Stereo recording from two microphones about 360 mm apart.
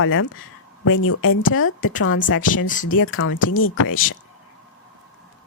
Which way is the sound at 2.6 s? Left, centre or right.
Left.